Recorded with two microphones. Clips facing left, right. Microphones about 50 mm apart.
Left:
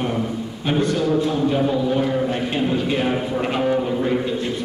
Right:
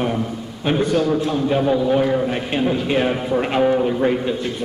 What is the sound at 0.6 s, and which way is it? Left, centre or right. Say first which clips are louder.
A man's voice: right 2 dB; centre.